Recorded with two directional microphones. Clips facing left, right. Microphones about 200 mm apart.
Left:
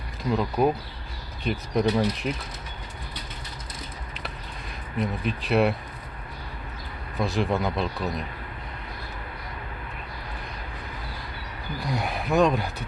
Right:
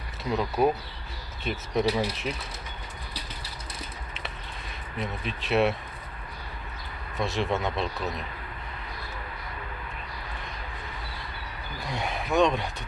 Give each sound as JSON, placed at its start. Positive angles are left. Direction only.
{"t": 0.3, "sound": "speech", "side_deg": 0}
{"t": 1.5, "sound": "speech", "side_deg": -5}
{"t": 4.9, "sound": "speech", "side_deg": 0}
{"t": 7.2, "sound": "speech", "side_deg": 0}
{"t": 11.8, "sound": "speech", "side_deg": 0}